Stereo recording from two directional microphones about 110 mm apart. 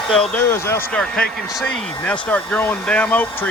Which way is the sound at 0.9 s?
10° left (ahead or behind).